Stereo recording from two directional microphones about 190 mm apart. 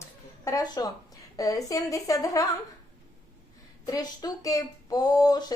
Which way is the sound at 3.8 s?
20° left (ahead or behind).